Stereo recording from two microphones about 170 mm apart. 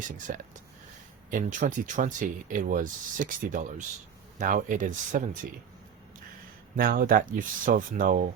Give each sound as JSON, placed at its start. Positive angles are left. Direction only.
{"t": 0.3, "sound": "speech", "side_deg": -55}
{"t": 6.7, "sound": "speech", "side_deg": -60}